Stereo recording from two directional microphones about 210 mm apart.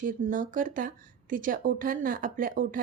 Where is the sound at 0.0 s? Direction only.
40° right (ahead or behind).